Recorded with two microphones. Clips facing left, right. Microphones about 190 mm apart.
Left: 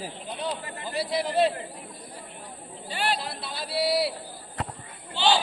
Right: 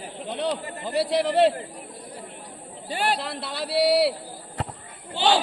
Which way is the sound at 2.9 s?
45° right (ahead or behind).